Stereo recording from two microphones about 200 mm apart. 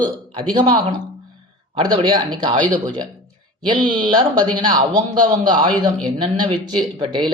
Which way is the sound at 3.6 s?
25° right (ahead or behind).